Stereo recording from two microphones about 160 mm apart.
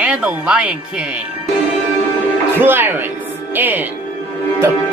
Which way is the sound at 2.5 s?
15° right (ahead or behind).